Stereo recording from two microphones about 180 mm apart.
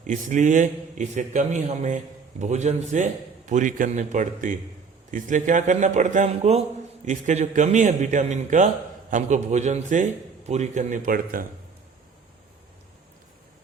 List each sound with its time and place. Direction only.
0.1 s a man's voice: 45° right (ahead or behind)